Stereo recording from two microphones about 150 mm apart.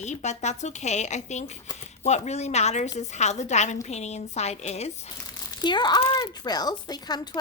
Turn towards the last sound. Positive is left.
turn(degrees=25)  # may be behind; listen again after turning